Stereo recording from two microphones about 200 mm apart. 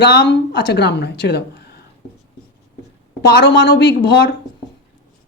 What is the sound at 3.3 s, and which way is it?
Speech, 55° left (ahead or behind).